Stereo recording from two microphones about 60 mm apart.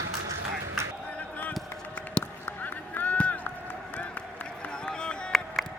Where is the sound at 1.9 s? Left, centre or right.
Left.